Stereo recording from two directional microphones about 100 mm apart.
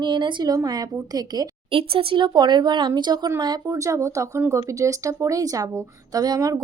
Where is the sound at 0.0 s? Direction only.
50° right (ahead or behind).